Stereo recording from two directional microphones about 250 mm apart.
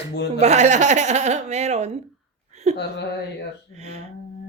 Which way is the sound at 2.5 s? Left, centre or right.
Right.